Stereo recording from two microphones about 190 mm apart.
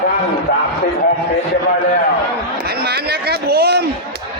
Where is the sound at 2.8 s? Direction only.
55° right (ahead or behind).